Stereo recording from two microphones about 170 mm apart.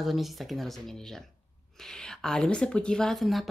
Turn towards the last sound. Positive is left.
turn(degrees=0)  # may be behind; listen again after turning